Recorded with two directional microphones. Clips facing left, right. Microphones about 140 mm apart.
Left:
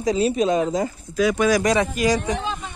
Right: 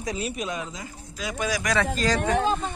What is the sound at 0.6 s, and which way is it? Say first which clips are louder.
Speech: left 15 dB; 45° left (ahead or behind).